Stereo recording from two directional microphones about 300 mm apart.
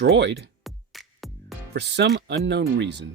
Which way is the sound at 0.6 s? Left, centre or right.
Centre.